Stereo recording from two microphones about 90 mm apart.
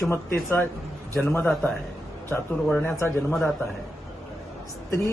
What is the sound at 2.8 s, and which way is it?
Speech, 25° left (ahead or behind).